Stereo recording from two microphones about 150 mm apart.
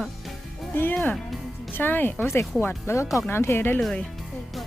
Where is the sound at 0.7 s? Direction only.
15° left (ahead or behind).